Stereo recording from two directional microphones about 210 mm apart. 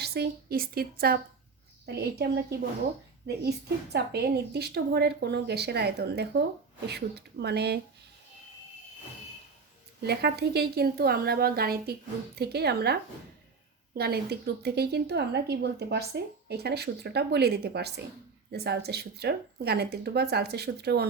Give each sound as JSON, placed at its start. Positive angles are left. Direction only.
{"t": 0.0, "sound": "speech", "side_deg": -50}
{"t": 3.9, "sound": "speech", "side_deg": -50}
{"t": 10.0, "sound": "speech", "side_deg": -50}